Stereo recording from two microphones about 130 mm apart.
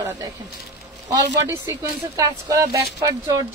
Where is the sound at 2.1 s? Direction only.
25° right (ahead or behind).